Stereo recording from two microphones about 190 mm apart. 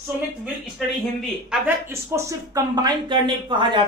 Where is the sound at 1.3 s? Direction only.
5° right (ahead or behind).